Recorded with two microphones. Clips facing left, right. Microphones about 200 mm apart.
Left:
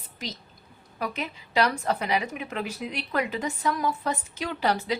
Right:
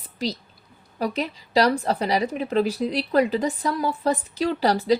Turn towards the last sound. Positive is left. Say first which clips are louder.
# right 6 dB
turn(degrees=-35)  # may be behind; listen again after turning